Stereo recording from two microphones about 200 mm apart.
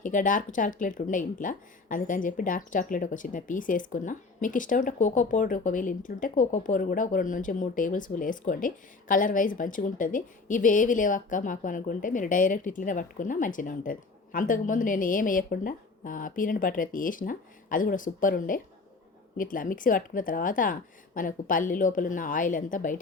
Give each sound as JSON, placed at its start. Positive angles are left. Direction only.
{"t": 0.0, "sound": "speech", "side_deg": 40}